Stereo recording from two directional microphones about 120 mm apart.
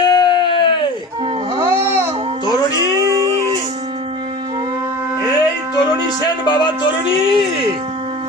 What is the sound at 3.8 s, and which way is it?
Music, 45° right (ahead or behind).